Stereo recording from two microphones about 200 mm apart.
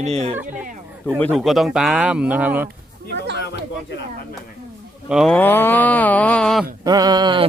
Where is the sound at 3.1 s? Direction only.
60° right (ahead or behind).